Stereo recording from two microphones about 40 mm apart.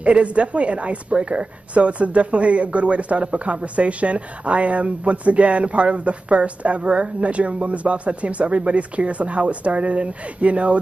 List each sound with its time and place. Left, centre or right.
0.0 s a woman's voice: right